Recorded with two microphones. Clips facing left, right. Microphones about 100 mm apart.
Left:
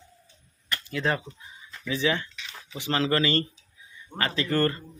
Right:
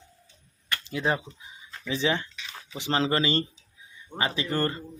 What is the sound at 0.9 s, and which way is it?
Speech, 15° right (ahead or behind).